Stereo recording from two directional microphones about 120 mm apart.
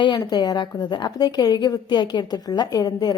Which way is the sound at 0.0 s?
35° left (ahead or behind).